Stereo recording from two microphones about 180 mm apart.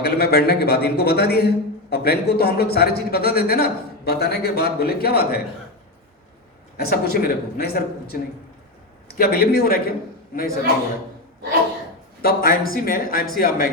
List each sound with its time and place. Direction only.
0.0 s a man's voice: 60° left (ahead or behind)
6.7 s a man's voice: 60° left (ahead or behind)
12.2 s a woman's voice: 55° left (ahead or behind)